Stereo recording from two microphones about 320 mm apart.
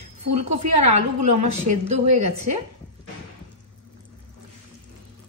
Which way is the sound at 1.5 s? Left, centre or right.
Right.